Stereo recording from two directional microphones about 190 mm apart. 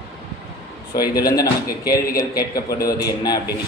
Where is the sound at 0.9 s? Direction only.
20° left (ahead or behind).